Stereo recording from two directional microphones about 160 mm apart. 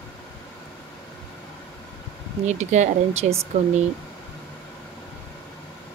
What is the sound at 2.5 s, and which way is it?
Speech, 45° right (ahead or behind).